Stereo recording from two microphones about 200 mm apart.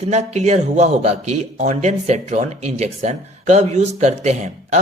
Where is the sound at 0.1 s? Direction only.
35° right (ahead or behind).